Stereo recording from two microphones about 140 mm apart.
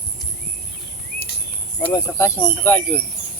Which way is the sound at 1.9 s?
20° left (ahead or behind).